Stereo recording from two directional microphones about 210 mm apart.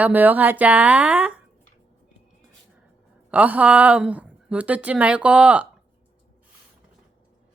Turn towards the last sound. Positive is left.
turn(degrees=-5)  # may be behind; listen again after turning